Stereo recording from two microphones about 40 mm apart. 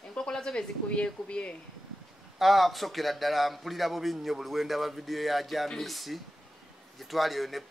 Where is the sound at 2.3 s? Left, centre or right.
Centre.